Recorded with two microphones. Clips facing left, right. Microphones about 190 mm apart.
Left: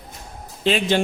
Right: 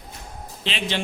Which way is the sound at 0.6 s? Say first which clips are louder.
Left 9 dB; 45° left (ahead or behind).